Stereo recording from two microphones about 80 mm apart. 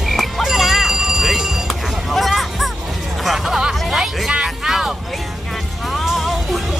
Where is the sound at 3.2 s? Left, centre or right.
Centre.